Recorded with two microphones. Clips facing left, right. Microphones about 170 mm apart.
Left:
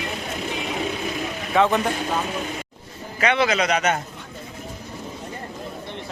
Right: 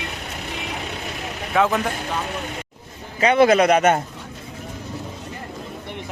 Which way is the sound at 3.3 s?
50° right (ahead or behind).